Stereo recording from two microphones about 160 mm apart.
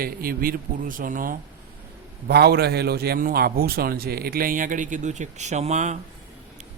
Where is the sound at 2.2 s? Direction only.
80° right; by 6.0 s 50° right (ahead or behind).